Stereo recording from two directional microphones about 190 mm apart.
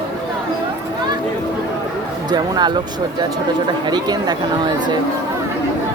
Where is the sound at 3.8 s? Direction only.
20° right (ahead or behind).